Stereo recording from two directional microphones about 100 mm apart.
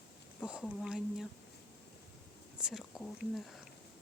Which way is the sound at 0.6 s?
5° right (ahead or behind).